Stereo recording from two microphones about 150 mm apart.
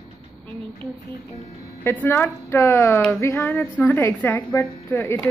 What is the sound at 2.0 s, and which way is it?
A woman's voice, 15° left (ahead or behind).